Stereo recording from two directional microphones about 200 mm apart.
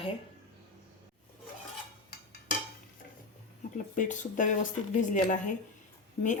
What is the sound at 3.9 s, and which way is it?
A woman's voice, 40° left (ahead or behind).